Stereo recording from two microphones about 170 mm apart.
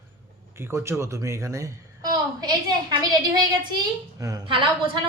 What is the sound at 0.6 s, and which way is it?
A woman's voice, 15° right (ahead or behind).